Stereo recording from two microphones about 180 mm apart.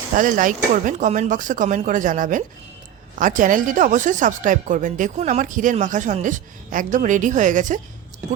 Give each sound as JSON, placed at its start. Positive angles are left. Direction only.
{"t": 0.2, "sound": "speech", "side_deg": -45}